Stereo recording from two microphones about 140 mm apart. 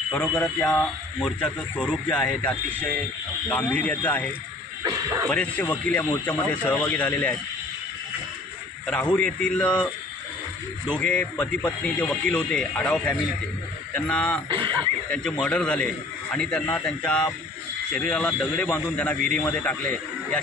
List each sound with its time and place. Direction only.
0.1 s a man's voice: 5° left (ahead or behind)
5.3 s a man's voice: 10° left (ahead or behind)
8.8 s a man's voice: 5° left (ahead or behind)
10.9 s a man's voice: 10° left (ahead or behind)
14.5 s speech: 35° right (ahead or behind)
15.0 s a man's voice: 5° left (ahead or behind)